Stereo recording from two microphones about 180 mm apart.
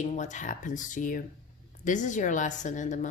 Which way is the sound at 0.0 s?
40° left (ahead or behind).